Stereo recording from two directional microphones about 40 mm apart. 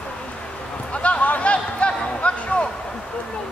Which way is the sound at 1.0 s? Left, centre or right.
Left.